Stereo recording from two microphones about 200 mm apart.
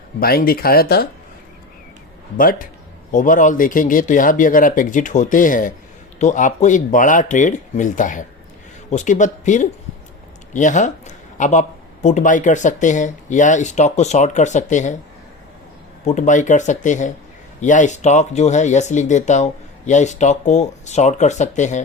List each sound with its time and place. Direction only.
0.2 s speech: 50° left (ahead or behind)
2.4 s speech: 45° left (ahead or behind)
16.0 s speech: 35° left (ahead or behind)